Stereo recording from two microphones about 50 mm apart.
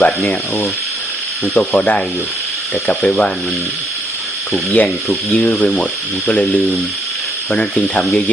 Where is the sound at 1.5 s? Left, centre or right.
Left.